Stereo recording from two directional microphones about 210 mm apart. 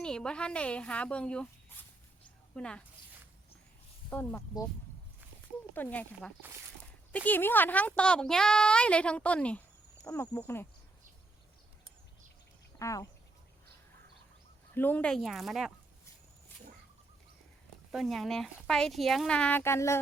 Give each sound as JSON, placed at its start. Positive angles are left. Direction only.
{"t": 0.0, "sound": "speech", "side_deg": 5}
{"t": 4.1, "sound": "speech", "side_deg": 10}
{"t": 5.7, "sound": "speech", "side_deg": 10}
{"t": 12.8, "sound": "speech", "side_deg": 15}
{"t": 14.8, "sound": "speech", "side_deg": 10}
{"t": 16.5, "sound": "a sound", "side_deg": 10}
{"t": 17.9, "sound": "speech", "side_deg": 0}